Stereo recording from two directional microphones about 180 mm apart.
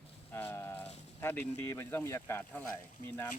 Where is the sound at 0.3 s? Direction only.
15° left (ahead or behind).